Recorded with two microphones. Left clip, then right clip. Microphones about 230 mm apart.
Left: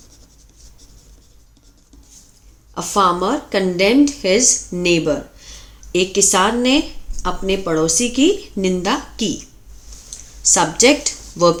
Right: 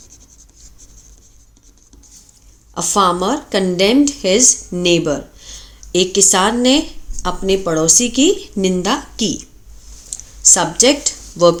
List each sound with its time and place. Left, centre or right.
2.7 s a woman's voice: right; by 11.5 s centre